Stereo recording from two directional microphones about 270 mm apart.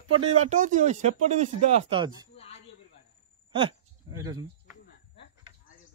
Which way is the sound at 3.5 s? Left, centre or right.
Centre.